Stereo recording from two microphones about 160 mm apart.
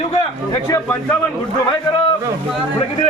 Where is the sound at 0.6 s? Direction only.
15° left (ahead or behind).